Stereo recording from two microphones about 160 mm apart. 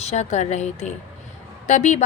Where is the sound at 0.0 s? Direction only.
45° left (ahead or behind).